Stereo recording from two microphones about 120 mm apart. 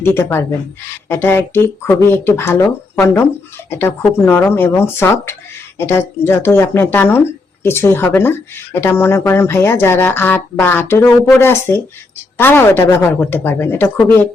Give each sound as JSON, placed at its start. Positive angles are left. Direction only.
{"t": 0.0, "sound": "speech", "side_deg": 20}